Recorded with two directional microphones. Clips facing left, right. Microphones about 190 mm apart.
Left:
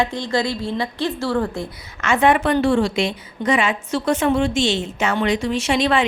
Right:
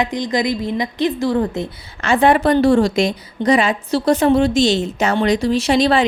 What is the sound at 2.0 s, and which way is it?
A woman's voice, 35° right (ahead or behind).